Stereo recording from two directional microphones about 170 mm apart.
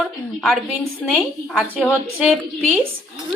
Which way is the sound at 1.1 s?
10° right (ahead or behind).